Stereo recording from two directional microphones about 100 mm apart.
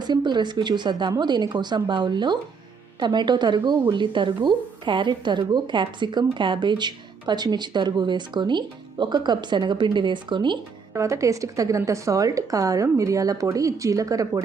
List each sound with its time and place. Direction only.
0.0 s speech: 45° right (ahead or behind)
10.9 s a woman's voice: 30° right (ahead or behind)